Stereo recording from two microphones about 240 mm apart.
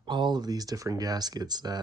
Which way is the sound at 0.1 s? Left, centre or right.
Centre.